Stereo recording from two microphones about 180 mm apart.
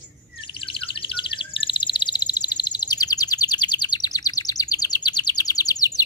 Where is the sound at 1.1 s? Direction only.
30° left (ahead or behind).